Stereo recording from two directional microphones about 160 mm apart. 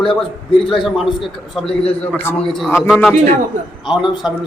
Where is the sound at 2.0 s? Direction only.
15° left (ahead or behind).